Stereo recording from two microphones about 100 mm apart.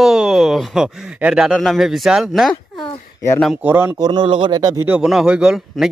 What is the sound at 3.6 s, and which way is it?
Speech, 15° right (ahead or behind).